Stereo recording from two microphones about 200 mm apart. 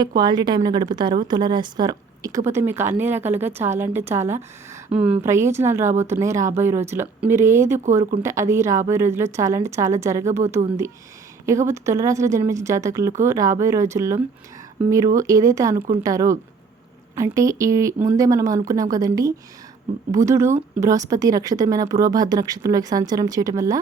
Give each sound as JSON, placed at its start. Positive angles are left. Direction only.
{"t": 0.2, "sound": "a woman's voice", "side_deg": -20}
{"t": 11.4, "sound": "a woman's voice", "side_deg": -15}